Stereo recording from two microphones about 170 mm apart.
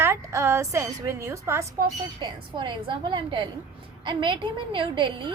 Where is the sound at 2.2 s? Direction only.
30° right (ahead or behind).